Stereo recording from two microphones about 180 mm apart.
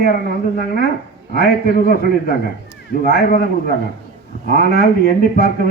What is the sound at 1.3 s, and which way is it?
A man's voice, 55° left (ahead or behind).